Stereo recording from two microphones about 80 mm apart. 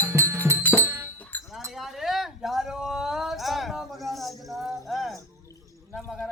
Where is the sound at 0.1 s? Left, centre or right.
Right.